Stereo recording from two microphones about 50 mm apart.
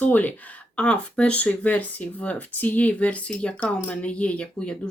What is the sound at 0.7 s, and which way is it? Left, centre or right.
Speech, left.